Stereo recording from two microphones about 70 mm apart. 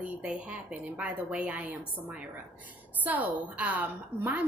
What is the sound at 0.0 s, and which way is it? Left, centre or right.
A woman's voice, centre.